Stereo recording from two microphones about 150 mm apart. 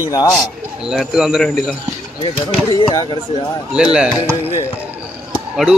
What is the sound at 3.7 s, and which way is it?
Speech, 5° right (ahead or behind).